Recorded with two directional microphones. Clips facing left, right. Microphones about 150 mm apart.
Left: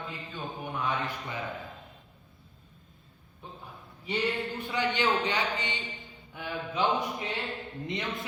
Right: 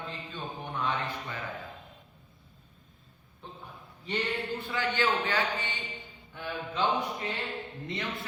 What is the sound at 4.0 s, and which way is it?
A man's voice, 10° left (ahead or behind).